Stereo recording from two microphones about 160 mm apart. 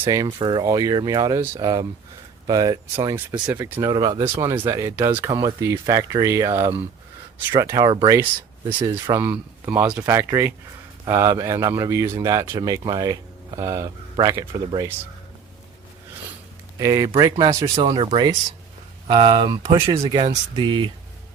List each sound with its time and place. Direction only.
0.0 s speech: 25° right (ahead or behind)
7.7 s speech: 25° right (ahead or behind)
8.8 s speech: 30° right (ahead or behind)
9.1 s speech: 10° right (ahead or behind)
16.7 s speech: 20° right (ahead or behind)
17.8 s speech: 35° right (ahead or behind)